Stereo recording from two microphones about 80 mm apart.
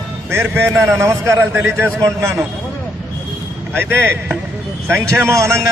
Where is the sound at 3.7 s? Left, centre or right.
Right.